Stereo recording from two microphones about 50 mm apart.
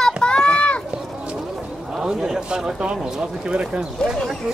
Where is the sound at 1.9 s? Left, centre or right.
Centre.